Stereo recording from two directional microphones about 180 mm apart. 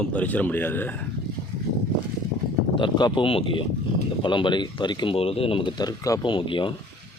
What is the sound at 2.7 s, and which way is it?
Speech, 25° left (ahead or behind).